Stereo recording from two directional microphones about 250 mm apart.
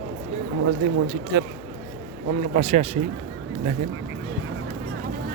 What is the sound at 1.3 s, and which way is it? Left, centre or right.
Speech, right.